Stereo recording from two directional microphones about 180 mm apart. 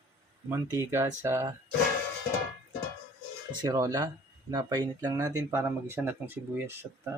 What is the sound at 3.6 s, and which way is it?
Speech, 15° right (ahead or behind).